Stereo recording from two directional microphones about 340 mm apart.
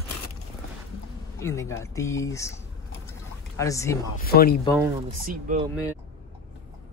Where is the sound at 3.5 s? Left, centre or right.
Centre.